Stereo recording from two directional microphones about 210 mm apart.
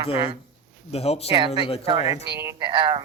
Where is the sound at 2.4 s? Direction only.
15° right (ahead or behind).